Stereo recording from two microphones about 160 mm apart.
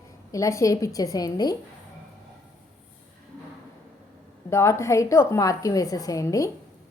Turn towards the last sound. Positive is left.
turn(degrees=20)  # may be behind; listen again after turning